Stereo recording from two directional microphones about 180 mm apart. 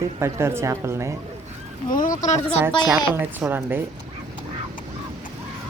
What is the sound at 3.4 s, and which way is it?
Speech, 10° right (ahead or behind).